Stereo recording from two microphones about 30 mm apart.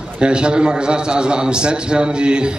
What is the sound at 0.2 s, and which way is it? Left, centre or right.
A man's voice, right.